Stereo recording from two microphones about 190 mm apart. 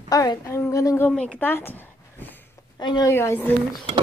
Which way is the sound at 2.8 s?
20° left (ahead or behind).